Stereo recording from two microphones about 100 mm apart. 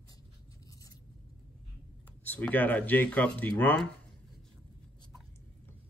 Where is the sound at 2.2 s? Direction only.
20° left (ahead or behind).